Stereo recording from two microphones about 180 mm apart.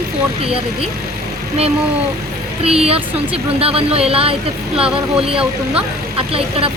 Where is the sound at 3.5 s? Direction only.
30° right (ahead or behind).